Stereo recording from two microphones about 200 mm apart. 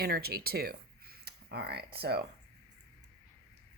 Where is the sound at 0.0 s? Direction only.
50° right (ahead or behind).